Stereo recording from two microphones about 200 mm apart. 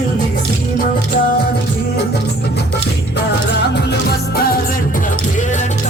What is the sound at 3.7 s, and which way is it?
Music, 55° left (ahead or behind).